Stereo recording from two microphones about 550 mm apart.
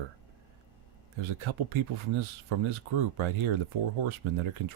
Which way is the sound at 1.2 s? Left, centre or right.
Right.